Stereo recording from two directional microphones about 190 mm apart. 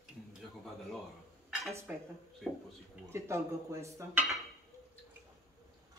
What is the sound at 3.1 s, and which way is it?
A woman's voice, 15° right (ahead or behind).